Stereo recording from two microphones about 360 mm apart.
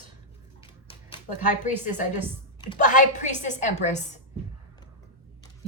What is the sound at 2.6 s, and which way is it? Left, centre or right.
A woman's voice, centre.